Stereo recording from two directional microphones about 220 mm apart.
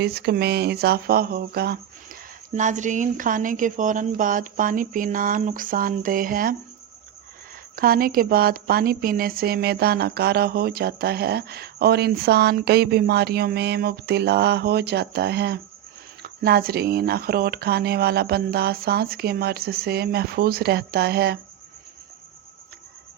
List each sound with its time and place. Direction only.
0.0 s a woman's voice: 45° right (ahead or behind)
7.8 s a woman's voice: 40° right (ahead or behind)